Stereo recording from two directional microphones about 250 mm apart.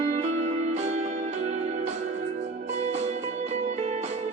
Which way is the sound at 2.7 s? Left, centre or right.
Right.